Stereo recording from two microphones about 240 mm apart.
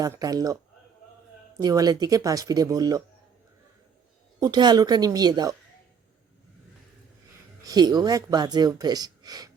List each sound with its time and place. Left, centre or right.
0.0 s speech: centre
4.4 s speech: centre
7.6 s speech: centre